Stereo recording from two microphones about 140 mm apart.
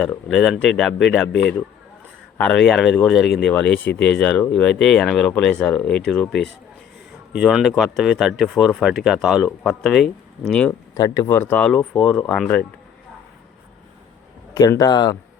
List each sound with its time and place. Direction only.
0.3 s speech: centre (ahead or behind)
2.4 s speech: 5° left (ahead or behind)
3.5 s speech: 10° left (ahead or behind)
10.9 s speech: 25° left (ahead or behind); by 12.6 s 5° left (ahead or behind)
14.5 s speech: 25° left (ahead or behind)